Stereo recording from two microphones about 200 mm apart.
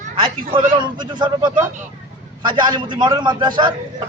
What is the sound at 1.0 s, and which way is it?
Speech, 20° right (ahead or behind).